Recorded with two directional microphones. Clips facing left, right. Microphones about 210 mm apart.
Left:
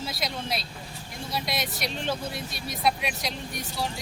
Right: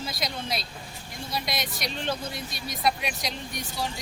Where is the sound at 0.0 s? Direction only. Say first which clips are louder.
Even; 5° left (ahead or behind).